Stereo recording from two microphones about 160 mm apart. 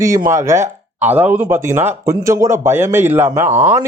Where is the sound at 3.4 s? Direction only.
45° right (ahead or behind).